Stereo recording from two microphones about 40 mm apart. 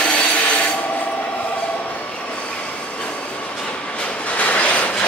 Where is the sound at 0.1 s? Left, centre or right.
Left.